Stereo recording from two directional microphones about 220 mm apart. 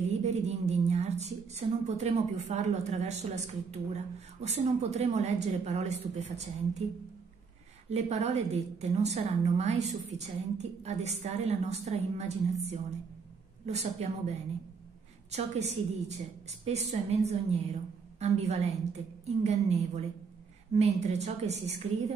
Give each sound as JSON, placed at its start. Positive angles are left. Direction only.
{"t": 0.2, "sound": "a woman's voice", "side_deg": -30}
{"t": 7.9, "sound": "a woman's voice", "side_deg": -30}
{"t": 15.3, "sound": "a woman's voice", "side_deg": -30}